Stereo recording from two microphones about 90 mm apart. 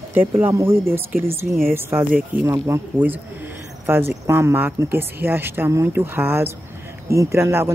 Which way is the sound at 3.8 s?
25° right (ahead or behind).